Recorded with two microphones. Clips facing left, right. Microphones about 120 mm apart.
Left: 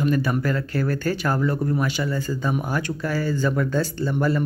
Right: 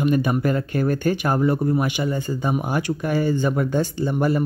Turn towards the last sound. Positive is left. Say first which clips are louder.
# right 2 dB
turn(degrees=-20)  # may be behind; listen again after turning